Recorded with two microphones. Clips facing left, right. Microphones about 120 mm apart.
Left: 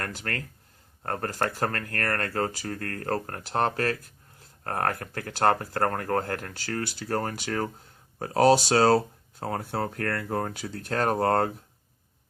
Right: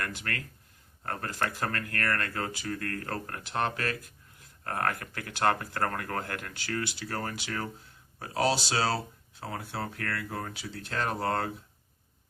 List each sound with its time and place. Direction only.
0.0 s speech: 40° left (ahead or behind)